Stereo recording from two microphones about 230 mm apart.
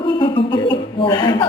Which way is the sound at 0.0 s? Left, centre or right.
Left.